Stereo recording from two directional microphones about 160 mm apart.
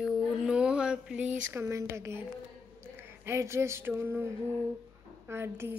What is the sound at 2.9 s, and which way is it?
Speech, 15° right (ahead or behind).